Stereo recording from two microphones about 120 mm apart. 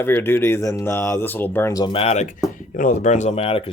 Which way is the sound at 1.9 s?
60° left (ahead or behind).